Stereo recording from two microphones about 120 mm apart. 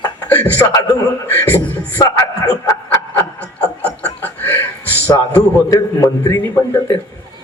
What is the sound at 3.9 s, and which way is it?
Chuckle, 15° left (ahead or behind).